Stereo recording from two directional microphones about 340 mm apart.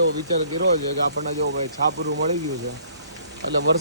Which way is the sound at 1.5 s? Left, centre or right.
Right.